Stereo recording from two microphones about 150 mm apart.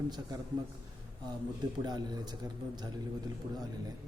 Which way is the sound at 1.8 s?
30° right (ahead or behind).